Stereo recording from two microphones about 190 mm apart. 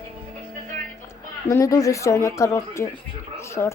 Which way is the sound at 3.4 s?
15° left (ahead or behind).